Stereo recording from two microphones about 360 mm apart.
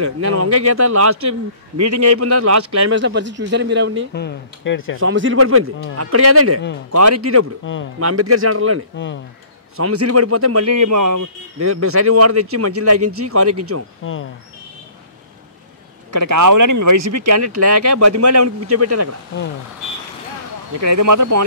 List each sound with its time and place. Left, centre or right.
0.0 s speech: right
4.1 s speech: left
4.9 s speech: right
7.7 s speech: left
8.0 s speech: right
8.9 s speech: left
9.8 s speech: right
16.1 s speech: right
20.8 s speech: right